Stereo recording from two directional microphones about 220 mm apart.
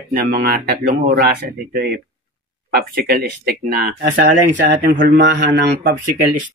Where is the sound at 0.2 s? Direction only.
45° right (ahead or behind).